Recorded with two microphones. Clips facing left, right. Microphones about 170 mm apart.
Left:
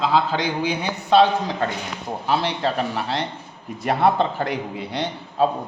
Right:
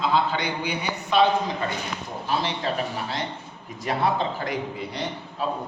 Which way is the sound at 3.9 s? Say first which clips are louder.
Left 5 dB; 60° left (ahead or behind).